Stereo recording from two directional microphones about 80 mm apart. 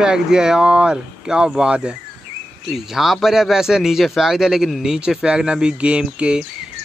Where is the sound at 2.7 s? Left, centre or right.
Centre.